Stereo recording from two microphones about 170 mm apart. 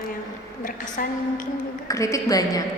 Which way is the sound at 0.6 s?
55° left (ahead or behind).